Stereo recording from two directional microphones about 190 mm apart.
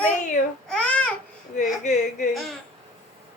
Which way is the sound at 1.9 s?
40° left (ahead or behind).